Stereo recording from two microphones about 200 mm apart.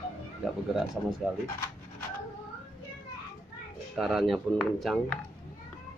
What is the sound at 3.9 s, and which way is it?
Speech, centre (ahead or behind).